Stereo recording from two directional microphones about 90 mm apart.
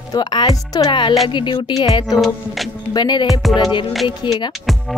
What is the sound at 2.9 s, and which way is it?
Speech, 50° left (ahead or behind).